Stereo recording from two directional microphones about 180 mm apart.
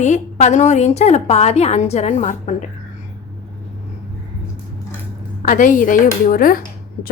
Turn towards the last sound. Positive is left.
turn(degrees=50)  # may be behind; listen again after turning